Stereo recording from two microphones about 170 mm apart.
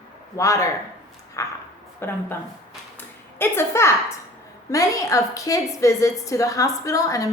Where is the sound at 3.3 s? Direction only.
15° left (ahead or behind).